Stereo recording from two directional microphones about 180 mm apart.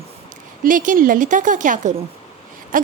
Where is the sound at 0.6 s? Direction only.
45° right (ahead or behind).